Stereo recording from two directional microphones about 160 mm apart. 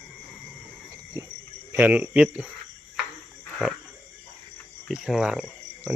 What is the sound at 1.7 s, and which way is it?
Speech, 10° right (ahead or behind).